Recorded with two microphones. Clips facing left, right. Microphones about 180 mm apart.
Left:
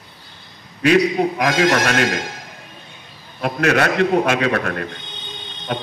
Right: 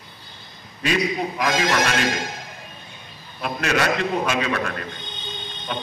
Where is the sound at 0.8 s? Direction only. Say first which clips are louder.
Left 8 dB; 65° left (ahead or behind).